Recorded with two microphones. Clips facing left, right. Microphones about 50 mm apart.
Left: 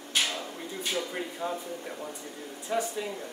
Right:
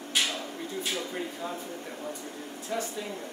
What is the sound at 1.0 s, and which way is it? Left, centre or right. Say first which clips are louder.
Speech: left 1 dB; centre.